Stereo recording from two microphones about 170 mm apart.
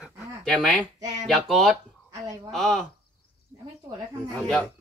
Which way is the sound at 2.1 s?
20° right (ahead or behind).